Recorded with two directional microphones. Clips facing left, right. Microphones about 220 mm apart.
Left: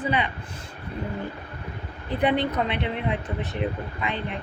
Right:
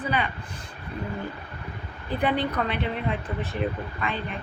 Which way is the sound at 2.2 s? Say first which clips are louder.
Left 2 dB; 20° left (ahead or behind).